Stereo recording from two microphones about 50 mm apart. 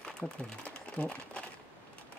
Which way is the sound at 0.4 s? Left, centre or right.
Left.